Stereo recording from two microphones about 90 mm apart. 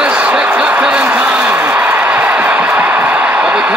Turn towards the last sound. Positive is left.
turn(degrees=-15)  # may be behind; listen again after turning